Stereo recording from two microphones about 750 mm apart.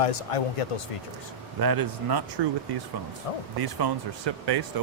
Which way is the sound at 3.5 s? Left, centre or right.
Right.